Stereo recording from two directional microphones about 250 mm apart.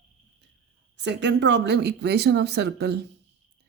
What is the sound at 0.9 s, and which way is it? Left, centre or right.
Speech, right.